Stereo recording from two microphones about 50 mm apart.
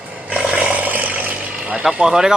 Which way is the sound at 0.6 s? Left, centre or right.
Right.